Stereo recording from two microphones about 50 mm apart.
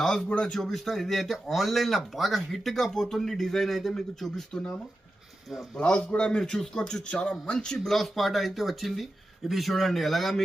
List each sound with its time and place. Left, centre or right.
0.0 s a man's voice: centre
0.6 s speech: centre
5.7 s a man's voice: left
7.9 s speech: centre